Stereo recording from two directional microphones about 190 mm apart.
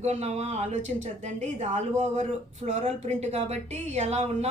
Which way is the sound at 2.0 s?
35° right (ahead or behind).